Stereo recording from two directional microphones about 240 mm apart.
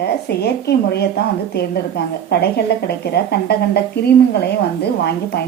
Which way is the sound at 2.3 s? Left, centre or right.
Left.